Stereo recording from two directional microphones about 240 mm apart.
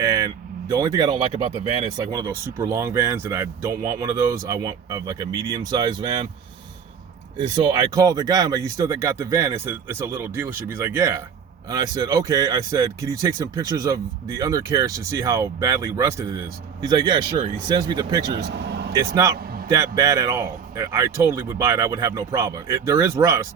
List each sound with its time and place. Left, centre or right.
0.0 s vehicle: centre
0.7 s speech: centre
7.3 s speech: centre
18.4 s a sound: right
18.9 s speech: centre